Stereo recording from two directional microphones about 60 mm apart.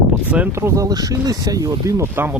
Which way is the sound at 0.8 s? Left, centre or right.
Right.